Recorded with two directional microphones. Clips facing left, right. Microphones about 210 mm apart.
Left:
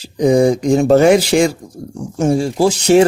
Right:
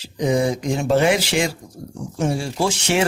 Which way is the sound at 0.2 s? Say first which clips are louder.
Left 8 dB; 40° left (ahead or behind).